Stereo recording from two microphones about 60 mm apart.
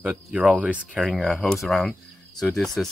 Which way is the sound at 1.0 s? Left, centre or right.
Centre.